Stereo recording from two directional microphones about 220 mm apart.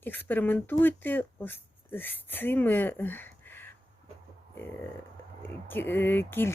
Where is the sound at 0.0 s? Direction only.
10° left (ahead or behind).